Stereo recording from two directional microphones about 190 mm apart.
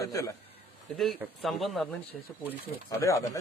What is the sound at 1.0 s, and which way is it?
Speech, centre (ahead or behind).